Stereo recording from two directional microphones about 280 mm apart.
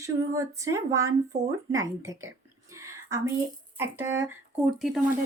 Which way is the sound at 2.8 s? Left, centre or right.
Centre.